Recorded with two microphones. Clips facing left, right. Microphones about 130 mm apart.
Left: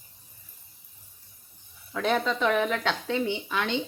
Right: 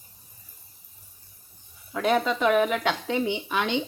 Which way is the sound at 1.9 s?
10° right (ahead or behind).